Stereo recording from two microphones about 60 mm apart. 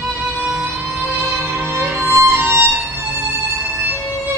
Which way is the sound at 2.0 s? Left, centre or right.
Right.